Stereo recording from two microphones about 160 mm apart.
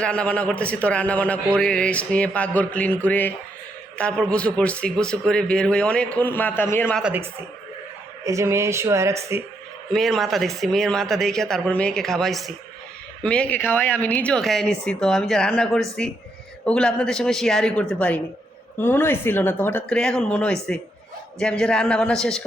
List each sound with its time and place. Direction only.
0.0 s a man's voice: 5° left (ahead or behind)
7.0 s speech: 10° right (ahead or behind)
9.9 s a man's voice: centre (ahead or behind)